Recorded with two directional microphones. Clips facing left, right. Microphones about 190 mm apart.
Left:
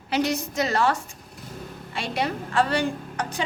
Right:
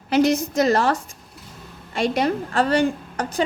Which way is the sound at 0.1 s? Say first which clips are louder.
Right 7 dB; 45° right (ahead or behind).